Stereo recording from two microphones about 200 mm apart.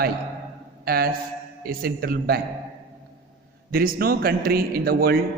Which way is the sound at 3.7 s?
50° right (ahead or behind).